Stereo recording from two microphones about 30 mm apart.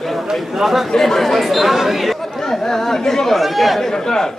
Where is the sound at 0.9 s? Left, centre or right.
Centre.